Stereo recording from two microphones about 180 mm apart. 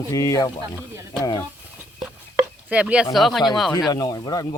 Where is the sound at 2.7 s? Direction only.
5° right (ahead or behind).